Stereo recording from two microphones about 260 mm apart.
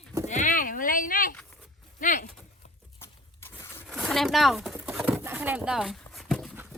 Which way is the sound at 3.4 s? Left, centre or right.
Centre.